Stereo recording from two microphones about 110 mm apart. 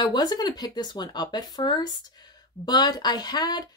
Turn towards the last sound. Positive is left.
turn(degrees=40)  # may be behind; listen again after turning